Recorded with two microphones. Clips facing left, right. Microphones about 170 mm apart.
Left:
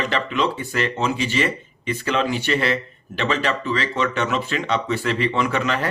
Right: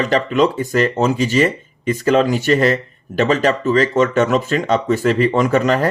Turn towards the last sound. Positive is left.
turn(degrees=-40)  # may be behind; listen again after turning